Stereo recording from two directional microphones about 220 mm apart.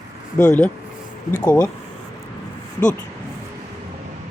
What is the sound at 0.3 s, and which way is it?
Speech, 10° left (ahead or behind).